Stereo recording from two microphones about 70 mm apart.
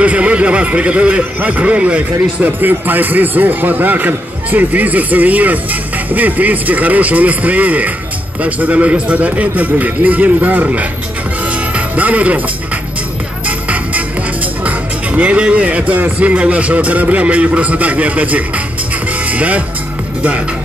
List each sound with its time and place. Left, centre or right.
0.0 s a man's voice: centre
11.7 s music: right
15.1 s a man's voice: centre